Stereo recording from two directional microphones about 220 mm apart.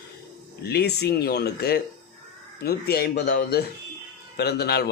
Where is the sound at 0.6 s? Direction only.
45° left (ahead or behind).